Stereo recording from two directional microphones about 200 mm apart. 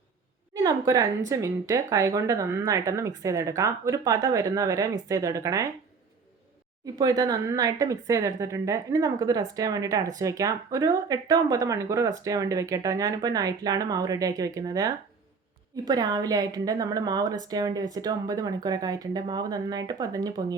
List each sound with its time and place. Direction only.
0.5 s speech: 20° right (ahead or behind)
7.0 s a woman's voice: 20° right (ahead or behind)